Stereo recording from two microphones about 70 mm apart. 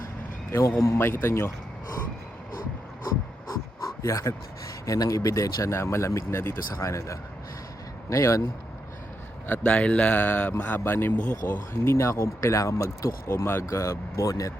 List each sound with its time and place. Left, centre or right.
0.9 s speech: left
3.8 s dog: left
4.9 s speech: left
9.5 s speech: centre; by 14.5 s left